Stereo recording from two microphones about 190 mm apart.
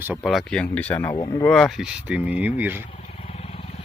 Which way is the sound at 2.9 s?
35° left (ahead or behind).